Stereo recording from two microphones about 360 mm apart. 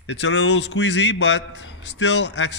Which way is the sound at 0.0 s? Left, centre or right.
Left.